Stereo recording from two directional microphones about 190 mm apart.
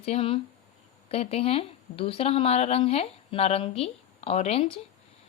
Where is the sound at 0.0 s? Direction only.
30° left (ahead or behind).